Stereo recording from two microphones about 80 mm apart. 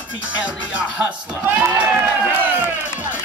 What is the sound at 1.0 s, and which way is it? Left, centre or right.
Speech, right.